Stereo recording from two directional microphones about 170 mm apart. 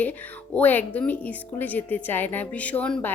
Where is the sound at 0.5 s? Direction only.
10° left (ahead or behind).